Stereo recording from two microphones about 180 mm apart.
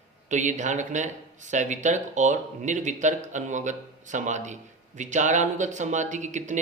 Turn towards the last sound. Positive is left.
turn(degrees=-40)  # may be behind; listen again after turning